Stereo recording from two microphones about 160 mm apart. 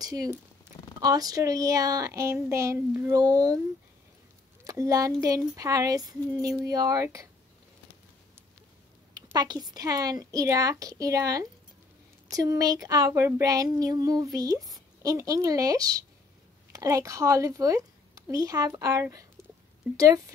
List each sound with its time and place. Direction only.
0.0 s a woman's voice: 20° right (ahead or behind)
4.6 s a woman's voice: 20° right (ahead or behind)
9.1 s a woman's voice: 25° right (ahead or behind)